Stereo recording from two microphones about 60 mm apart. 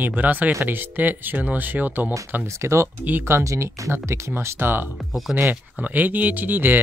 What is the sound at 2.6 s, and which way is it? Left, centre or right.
Speech, right.